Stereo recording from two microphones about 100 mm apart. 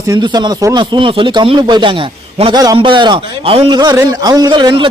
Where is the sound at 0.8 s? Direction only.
60° right (ahead or behind).